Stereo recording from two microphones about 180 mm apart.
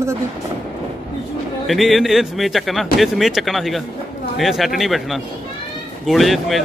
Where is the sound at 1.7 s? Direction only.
Centre (ahead or behind).